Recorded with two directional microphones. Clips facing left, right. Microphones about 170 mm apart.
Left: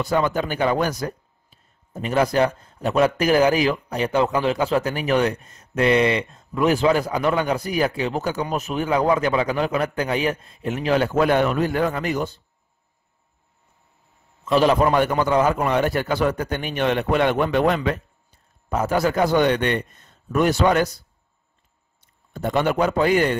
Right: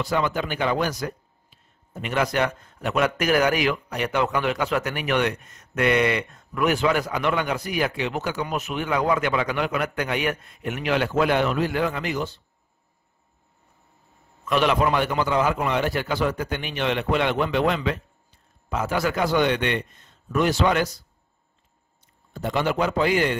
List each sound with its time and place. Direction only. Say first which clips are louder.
0.0 s a man's voice: left 3 dB; 45° left (ahead or behind)
2.0 s a man's voice: left 4 dB; 35° left (ahead or behind)
14.4 s a man's voice: left 4 dB; 35° left (ahead or behind)
22.3 s a man's voice: left 3 dB; 50° left (ahead or behind)